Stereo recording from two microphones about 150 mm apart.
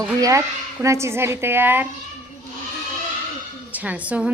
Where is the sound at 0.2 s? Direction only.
20° right (ahead or behind).